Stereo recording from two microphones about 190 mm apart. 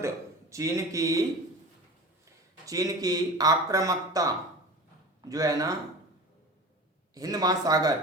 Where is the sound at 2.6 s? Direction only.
20° right (ahead or behind).